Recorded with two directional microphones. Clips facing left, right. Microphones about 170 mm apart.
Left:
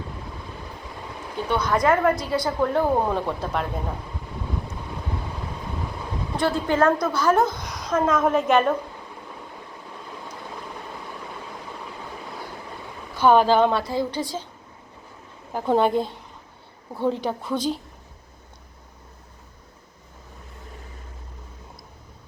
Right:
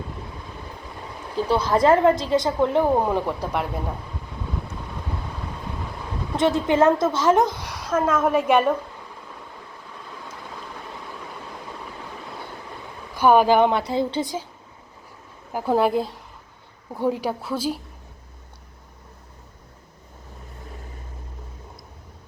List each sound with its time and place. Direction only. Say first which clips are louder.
1.4 s a woman's voice: right 3 dB; 30° right (ahead or behind); by 3.7 s 10° right (ahead or behind)
6.3 s a woman's voice: right 3 dB; 20° right (ahead or behind)
13.1 s a woman's voice: right 1 dB; 10° right (ahead or behind)
15.5 s a woman's voice: even; 5° right (ahead or behind)